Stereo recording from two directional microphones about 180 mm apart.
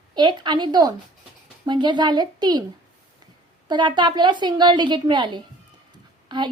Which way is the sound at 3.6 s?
25° right (ahead or behind).